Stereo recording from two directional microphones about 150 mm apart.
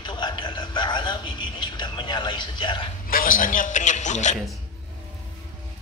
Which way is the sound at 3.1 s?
65° left (ahead or behind).